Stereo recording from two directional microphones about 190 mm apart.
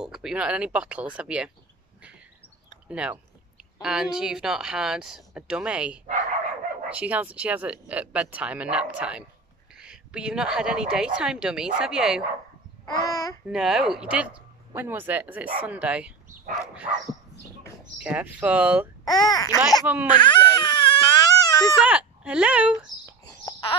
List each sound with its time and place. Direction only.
0.0 s a woman's voice: 5° right (ahead or behind)
2.9 s a woman's voice: 5° right (ahead or behind)
12.8 s babbling: 20° left (ahead or behind)
13.5 s speech: 5° right (ahead or behind)
17.9 s speech: 5° right (ahead or behind)
19.0 s a child's voice: 20° left (ahead or behind)
19.9 s speech: 10° right (ahead or behind)
20.2 s baby cry: 20° left (ahead or behind)
21.8 s speech: 5° right (ahead or behind)
23.4 s babbling: 25° left (ahead or behind)